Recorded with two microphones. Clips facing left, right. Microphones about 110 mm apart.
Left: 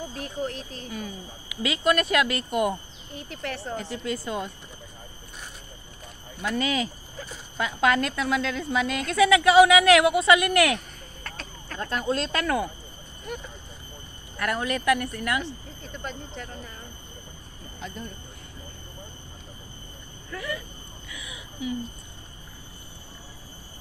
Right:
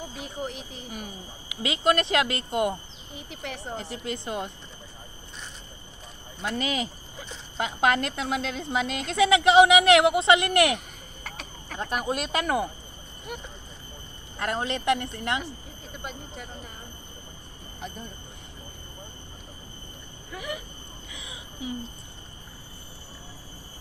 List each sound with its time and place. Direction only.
0.1 s speech: 10° right (ahead or behind)
1.6 s a woman's voice: 25° right (ahead or behind)
6.6 s a woman's voice: 25° right (ahead or behind)
11.3 s speech: 15° right (ahead or behind)
14.3 s a woman's voice: 25° right (ahead or behind)
16.0 s speech: 10° right (ahead or behind)
17.7 s speech: 20° right (ahead or behind)
20.3 s a woman's voice: 20° right (ahead or behind)
21.1 s a sound: 30° right (ahead or behind)